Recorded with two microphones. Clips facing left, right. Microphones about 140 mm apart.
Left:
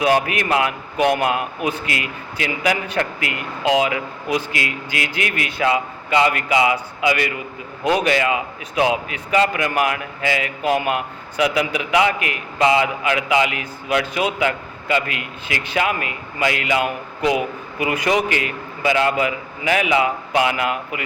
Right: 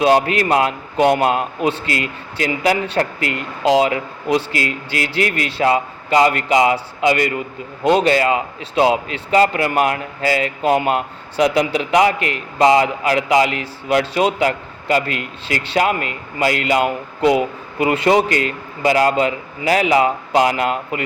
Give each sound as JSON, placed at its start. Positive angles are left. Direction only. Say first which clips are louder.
{"t": 0.0, "sound": "a man's voice", "louder": "right 4 dB", "side_deg": -30}
{"t": 7.9, "sound": "a man's voice", "louder": "right 4 dB", "side_deg": -25}
{"t": 8.1, "sound": "a man's voice", "louder": "right 3 dB", "side_deg": -35}
{"t": 18.8, "sound": "a man's voice", "louder": "right 3 dB", "side_deg": -40}